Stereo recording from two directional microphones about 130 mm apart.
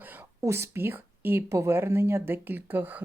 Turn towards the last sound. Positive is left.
turn(degrees=-15)  # may be behind; listen again after turning